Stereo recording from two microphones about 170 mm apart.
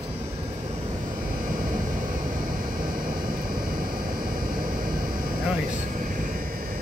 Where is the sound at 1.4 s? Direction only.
55° right (ahead or behind).